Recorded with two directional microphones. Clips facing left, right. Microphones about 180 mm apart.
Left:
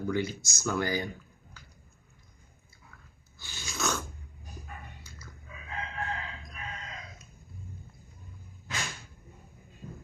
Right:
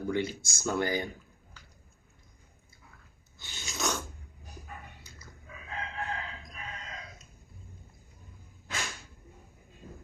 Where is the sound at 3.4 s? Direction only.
20° right (ahead or behind).